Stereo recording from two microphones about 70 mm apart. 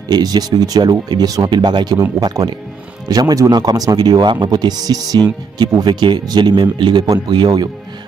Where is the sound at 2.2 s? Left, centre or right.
Right.